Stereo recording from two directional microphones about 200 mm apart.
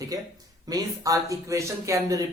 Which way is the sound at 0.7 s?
15° right (ahead or behind).